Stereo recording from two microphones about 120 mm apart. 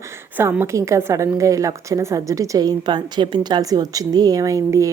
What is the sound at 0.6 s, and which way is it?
A woman's voice, 25° right (ahead or behind).